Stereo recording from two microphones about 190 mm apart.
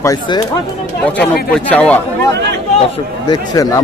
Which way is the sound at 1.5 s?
5° left (ahead or behind).